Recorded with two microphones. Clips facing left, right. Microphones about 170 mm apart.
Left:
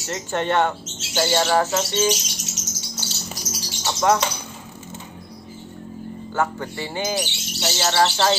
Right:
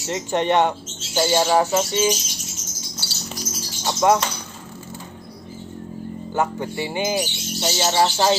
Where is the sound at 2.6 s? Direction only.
80° left.